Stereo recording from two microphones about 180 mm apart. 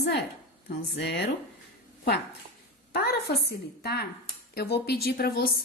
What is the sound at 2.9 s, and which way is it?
Speech, 60° left (ahead or behind).